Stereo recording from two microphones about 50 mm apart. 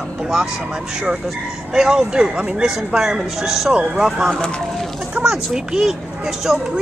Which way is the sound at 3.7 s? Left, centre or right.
Centre.